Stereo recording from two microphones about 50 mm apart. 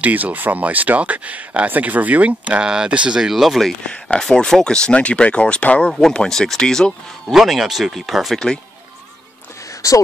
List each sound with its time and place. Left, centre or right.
0.0 s speech: right
3.2 s speech: centre
3.8 s speech: left
7.3 s speech: centre
9.8 s speech: left